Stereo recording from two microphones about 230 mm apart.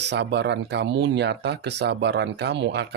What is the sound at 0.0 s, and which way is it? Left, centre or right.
Speech, right.